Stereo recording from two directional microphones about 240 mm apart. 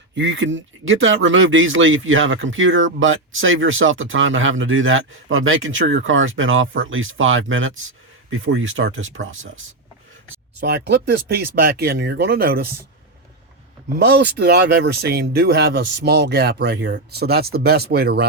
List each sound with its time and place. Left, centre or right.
0.1 s speech: right
10.6 s speech: right
14.0 s speech: right